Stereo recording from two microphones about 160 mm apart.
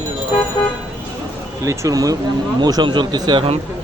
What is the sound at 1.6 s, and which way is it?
Speech, 20° right (ahead or behind).